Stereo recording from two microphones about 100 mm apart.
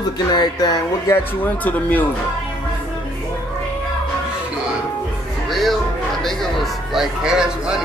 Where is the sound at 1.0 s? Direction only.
15° left (ahead or behind).